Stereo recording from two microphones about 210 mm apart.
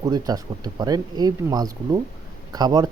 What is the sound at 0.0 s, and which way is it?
Speech, 20° right (ahead or behind).